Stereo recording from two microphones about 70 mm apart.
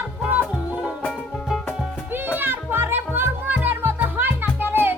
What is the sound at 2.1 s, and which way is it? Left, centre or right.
Music, right.